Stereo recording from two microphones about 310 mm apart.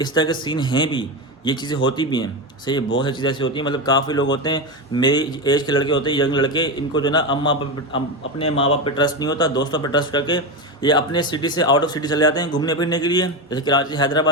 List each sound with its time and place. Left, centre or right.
0.0 s speech: centre